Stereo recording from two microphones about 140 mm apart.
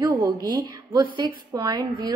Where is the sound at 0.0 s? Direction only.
25° right (ahead or behind).